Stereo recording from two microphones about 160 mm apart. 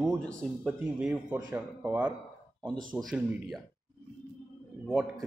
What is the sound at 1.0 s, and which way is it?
Speech, 10° right (ahead or behind).